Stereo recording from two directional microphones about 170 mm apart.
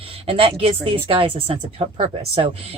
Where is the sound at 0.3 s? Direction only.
35° right (ahead or behind).